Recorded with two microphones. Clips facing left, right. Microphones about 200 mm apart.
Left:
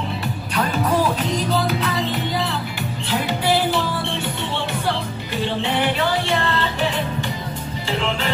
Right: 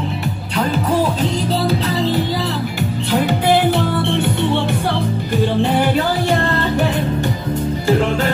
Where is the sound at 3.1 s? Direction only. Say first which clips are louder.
Right 5 dB; 55° right (ahead or behind).